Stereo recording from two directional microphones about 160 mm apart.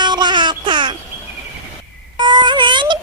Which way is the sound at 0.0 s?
25° right (ahead or behind).